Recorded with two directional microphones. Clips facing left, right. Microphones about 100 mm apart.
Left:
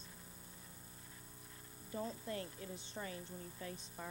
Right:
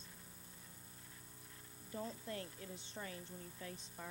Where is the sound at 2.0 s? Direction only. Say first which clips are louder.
Left 3 dB; 20° left (ahead or behind).